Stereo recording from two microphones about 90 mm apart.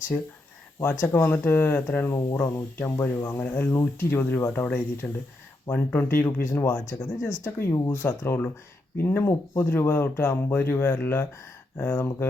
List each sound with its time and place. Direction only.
0.8 s speech: 20° left (ahead or behind)